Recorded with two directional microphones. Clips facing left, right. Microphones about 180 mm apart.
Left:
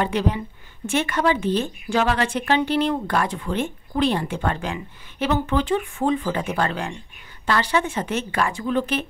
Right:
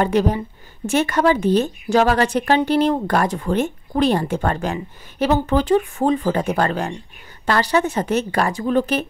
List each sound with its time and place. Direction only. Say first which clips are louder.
0.0 s a woman's voice: right 5 dB; 45° right (ahead or behind)